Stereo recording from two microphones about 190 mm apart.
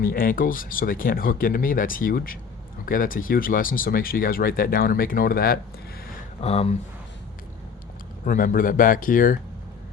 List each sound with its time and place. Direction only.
0.0 s speech: 50° left (ahead or behind)
6.4 s speech: 35° left (ahead or behind)
8.2 s speech: 45° left (ahead or behind)